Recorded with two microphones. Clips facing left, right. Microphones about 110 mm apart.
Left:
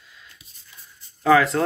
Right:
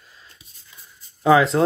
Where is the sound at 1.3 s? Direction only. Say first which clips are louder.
Right 2 dB; 20° right (ahead or behind).